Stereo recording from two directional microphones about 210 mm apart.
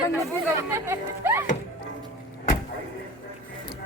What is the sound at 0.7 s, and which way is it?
Speech, 10° right (ahead or behind).